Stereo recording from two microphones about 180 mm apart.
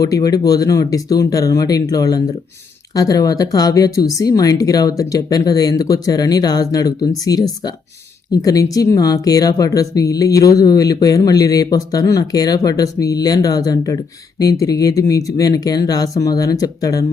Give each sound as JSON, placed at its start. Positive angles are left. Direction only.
{"t": 0.0, "sound": "speech", "side_deg": 20}